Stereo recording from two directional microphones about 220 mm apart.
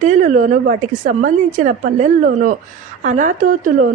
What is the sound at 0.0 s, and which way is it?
A woman's voice, 35° right (ahead or behind).